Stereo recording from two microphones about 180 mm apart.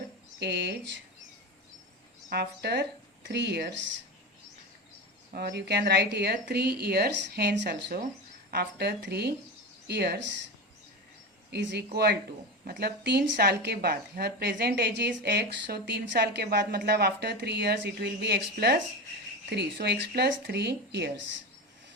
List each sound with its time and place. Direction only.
0.3 s speech: 70° right (ahead or behind)
2.3 s speech: 65° right (ahead or behind); by 3.9 s 80° right
5.3 s speech: 65° right (ahead or behind)
11.5 s speech: 70° right (ahead or behind)